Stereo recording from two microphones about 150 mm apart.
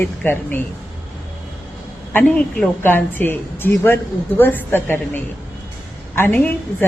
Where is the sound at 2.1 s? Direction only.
10° left (ahead or behind).